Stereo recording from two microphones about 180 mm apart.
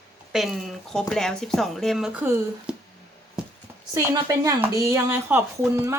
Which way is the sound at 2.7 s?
5° right (ahead or behind).